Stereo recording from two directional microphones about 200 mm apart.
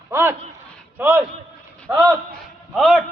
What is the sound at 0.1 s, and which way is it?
A man's voice, 10° right (ahead or behind).